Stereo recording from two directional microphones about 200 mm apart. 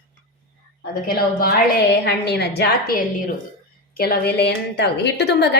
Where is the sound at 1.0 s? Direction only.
50° left (ahead or behind).